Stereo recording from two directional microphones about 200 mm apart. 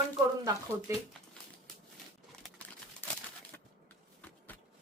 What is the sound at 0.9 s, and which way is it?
Speech, 15° right (ahead or behind).